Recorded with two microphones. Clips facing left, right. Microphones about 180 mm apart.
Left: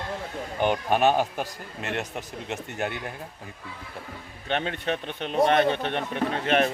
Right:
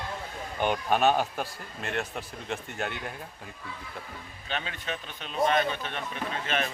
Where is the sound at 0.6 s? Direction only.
15° left (ahead or behind).